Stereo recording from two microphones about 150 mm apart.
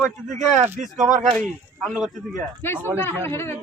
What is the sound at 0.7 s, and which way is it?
Speech, 55° right (ahead or behind).